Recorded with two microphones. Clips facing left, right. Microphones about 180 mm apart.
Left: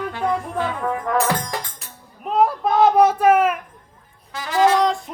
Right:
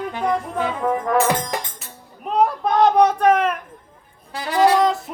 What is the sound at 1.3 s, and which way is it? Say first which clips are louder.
Music: right 2 dB; 20° right (ahead or behind).